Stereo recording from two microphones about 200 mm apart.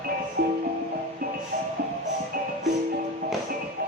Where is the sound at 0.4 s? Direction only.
45° right (ahead or behind).